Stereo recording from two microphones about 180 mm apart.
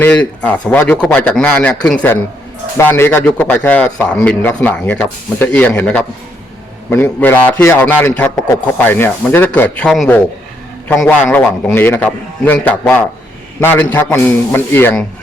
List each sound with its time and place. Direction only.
0.0 s a man's voice: 5° left (ahead or behind)